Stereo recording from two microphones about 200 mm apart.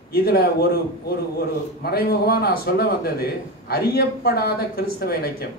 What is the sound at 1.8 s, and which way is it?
Speech, 50° left (ahead or behind).